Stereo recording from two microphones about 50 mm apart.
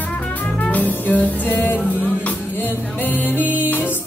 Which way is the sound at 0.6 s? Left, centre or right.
Left.